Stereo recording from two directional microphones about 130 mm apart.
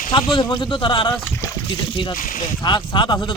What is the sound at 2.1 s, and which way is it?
Speech, 90° left.